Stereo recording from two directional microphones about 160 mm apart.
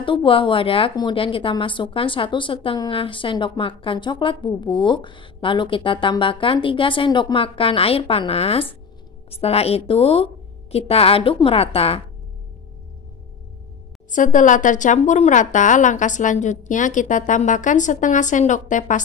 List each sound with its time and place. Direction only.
0.0 s a woman's voice: 30° left (ahead or behind)
14.1 s a woman's voice: 55° left (ahead or behind)